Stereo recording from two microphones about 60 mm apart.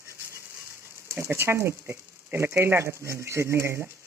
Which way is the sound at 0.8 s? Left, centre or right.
Right.